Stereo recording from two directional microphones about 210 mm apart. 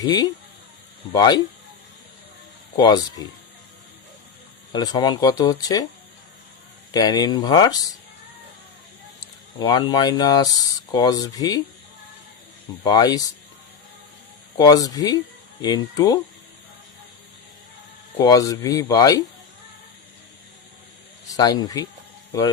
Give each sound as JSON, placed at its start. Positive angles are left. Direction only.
{"t": 0.0, "sound": "speech", "side_deg": 20}
{"t": 2.7, "sound": "speech", "side_deg": 20}
{"t": 4.7, "sound": "speech", "side_deg": 20}
{"t": 6.9, "sound": "speech", "side_deg": 20}
{"t": 9.6, "sound": "speech", "side_deg": 20}
{"t": 12.8, "sound": "speech", "side_deg": 15}
{"t": 14.5, "sound": "speech", "side_deg": 20}
{"t": 18.2, "sound": "speech", "side_deg": 15}
{"t": 21.2, "sound": "a man's voice", "side_deg": 20}